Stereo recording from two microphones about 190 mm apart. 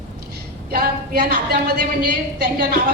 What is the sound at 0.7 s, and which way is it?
Speech, 55° right (ahead or behind).